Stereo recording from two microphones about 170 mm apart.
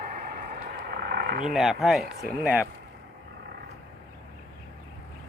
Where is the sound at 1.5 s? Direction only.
Centre (ahead or behind).